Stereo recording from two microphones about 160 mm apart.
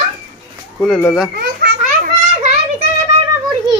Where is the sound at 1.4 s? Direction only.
65° right (ahead or behind).